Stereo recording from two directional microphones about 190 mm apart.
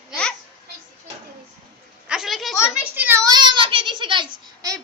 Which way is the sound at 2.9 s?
10° right (ahead or behind).